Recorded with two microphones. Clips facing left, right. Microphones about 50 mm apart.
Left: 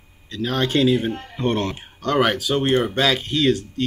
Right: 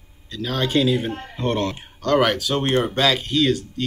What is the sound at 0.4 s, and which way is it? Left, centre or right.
Speech, centre.